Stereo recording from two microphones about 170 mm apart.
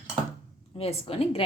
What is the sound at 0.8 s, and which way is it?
Speech, 35° left (ahead or behind).